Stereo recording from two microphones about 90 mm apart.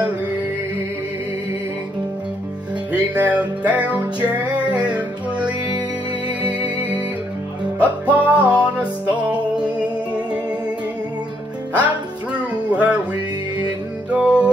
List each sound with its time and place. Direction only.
3.2 s music: 15° right (ahead or behind)
11.8 s music: 15° right (ahead or behind)
14.1 s music: 10° right (ahead or behind)